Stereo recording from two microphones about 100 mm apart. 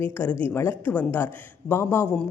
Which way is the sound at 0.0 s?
20° left (ahead or behind).